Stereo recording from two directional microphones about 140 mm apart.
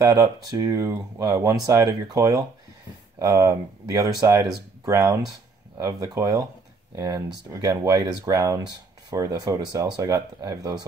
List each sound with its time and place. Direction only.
0.0 s speech: 25° right (ahead or behind)